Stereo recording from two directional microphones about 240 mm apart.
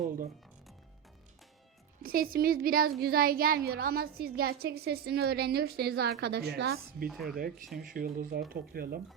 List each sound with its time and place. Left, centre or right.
2.0 s a woman's voice: right
7.1 s speech: centre
7.8 s a woman's voice: right